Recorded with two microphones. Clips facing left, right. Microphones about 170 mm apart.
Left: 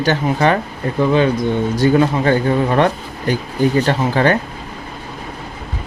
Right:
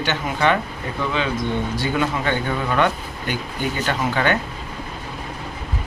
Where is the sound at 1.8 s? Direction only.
35° left (ahead or behind).